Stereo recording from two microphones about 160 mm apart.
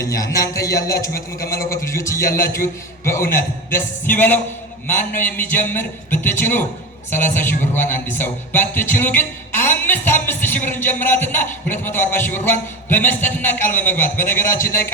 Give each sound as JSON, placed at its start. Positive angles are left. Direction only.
{"t": 0.0, "sound": "a man's voice", "side_deg": 20}